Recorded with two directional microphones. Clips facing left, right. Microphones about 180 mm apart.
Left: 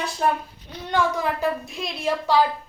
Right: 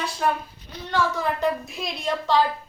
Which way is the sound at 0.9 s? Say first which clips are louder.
Left 1 dB; 15° left (ahead or behind).